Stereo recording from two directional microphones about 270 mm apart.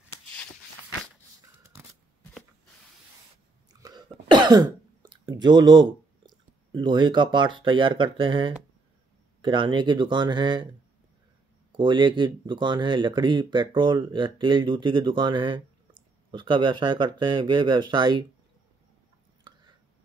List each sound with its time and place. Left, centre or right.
3.8 s cough: centre
9.4 s speech: centre
11.7 s speech: centre
19.5 s whispering: centre